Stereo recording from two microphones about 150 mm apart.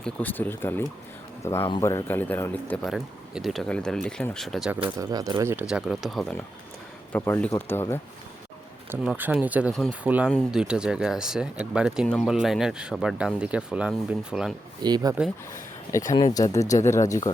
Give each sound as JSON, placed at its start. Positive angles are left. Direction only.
{"t": 0.0, "sound": "a man's voice", "side_deg": 10}
{"t": 2.9, "sound": "speech", "side_deg": 0}
{"t": 4.9, "sound": "speech", "side_deg": -25}
{"t": 5.6, "sound": "speech", "side_deg": -5}
{"t": 7.1, "sound": "a man's voice", "side_deg": 15}
{"t": 8.9, "sound": "a man's voice", "side_deg": -10}
{"t": 14.8, "sound": "speech", "side_deg": -30}
{"t": 16.3, "sound": "speech", "side_deg": 20}